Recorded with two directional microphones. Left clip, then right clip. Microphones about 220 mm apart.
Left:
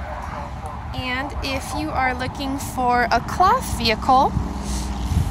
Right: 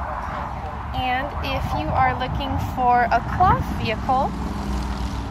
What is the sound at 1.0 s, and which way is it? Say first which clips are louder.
Speech: right 2 dB; 40° left (ahead or behind).